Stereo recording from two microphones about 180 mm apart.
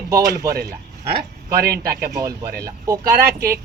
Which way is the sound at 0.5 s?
60° right (ahead or behind).